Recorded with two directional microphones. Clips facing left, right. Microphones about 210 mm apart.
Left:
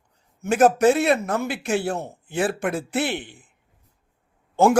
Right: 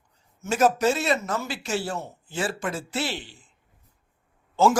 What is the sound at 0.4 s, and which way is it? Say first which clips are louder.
Speech: left 5 dB; 55° left (ahead or behind).